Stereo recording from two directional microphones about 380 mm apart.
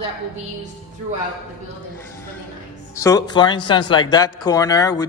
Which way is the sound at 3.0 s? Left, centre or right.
Centre.